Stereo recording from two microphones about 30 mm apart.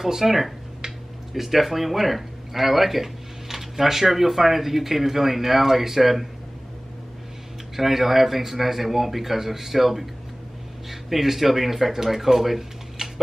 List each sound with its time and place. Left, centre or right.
0.0 s speech: centre
7.7 s speech: centre
13.0 s tick-tock: centre